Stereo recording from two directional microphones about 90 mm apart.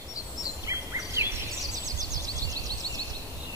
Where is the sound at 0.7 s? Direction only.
35° right (ahead or behind).